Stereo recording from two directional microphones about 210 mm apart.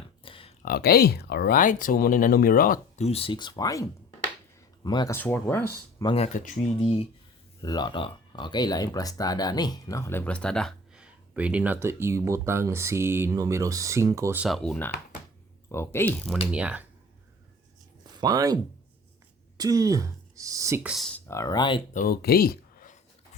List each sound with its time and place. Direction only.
0.2 s a sound: 25° left (ahead or behind)
0.6 s speech: 45° left (ahead or behind); by 5.6 s 10° left (ahead or behind)
6.0 s speech: 25° left (ahead or behind); by 14.4 s 15° right (ahead or behind)
14.4 s speech: centre (ahead or behind)
16.5 s speech: 5° right (ahead or behind)
18.2 s speech: 15° right (ahead or behind)
20.9 s speech: centre (ahead or behind)
21.2 s speech: 15° left (ahead or behind)
21.9 s speech: 45° left (ahead or behind)